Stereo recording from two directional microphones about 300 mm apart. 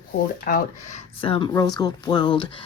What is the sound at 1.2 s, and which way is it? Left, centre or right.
Speech, centre.